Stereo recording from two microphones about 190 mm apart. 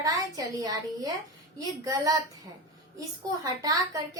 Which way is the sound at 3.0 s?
20° right (ahead or behind).